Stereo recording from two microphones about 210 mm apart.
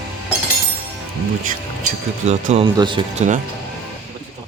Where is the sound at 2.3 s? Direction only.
30° right (ahead or behind).